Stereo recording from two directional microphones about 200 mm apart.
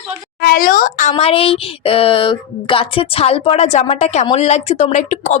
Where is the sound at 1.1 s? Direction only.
30° left (ahead or behind).